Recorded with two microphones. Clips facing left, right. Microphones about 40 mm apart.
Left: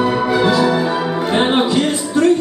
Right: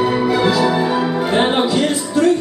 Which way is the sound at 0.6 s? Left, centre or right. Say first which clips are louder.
Even; centre.